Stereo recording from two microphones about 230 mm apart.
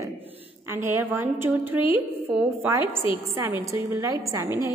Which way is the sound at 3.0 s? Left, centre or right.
Left.